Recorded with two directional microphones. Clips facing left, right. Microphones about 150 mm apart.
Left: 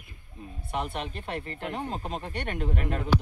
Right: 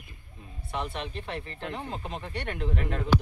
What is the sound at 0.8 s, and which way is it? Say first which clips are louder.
Speech: left 1 dB; 50° left (ahead or behind).